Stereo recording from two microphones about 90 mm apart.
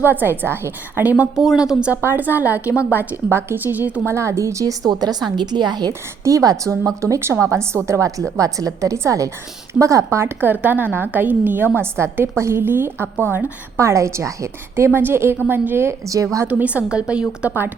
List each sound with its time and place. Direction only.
0.0 s a woman's voice: 25° right (ahead or behind)
1.2 s a woman's voice: 10° right (ahead or behind)
1.9 s a woman's voice: 20° right (ahead or behind)
4.1 s a woman's voice: 35° right (ahead or behind); by 5.9 s 50° right (ahead or behind)
5.9 s a woman's voice: 35° right (ahead or behind)
16.5 s a woman's voice: 15° right (ahead or behind)